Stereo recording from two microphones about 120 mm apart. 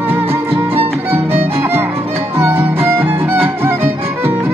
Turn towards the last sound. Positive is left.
turn(degrees=-20)  # may be behind; listen again after turning